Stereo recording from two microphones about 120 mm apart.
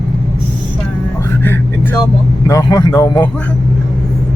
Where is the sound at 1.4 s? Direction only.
15° left (ahead or behind).